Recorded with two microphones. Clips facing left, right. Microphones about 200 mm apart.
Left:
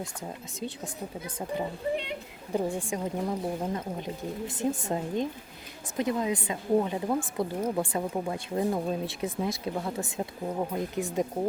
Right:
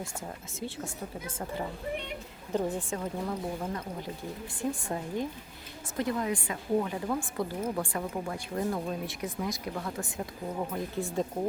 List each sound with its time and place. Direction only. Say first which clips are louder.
0.0 s speech: left 2 dB; 15° left (ahead or behind)
2.5 s speech: left 1 dB; 10° left (ahead or behind)